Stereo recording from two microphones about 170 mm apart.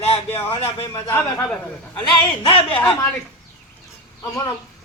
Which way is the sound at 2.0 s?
30° left (ahead or behind).